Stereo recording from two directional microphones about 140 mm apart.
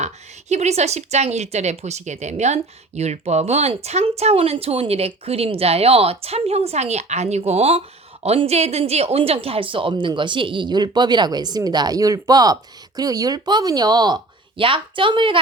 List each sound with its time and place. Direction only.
0.0 s speech: 55° right (ahead or behind); by 15.4 s 35° right (ahead or behind)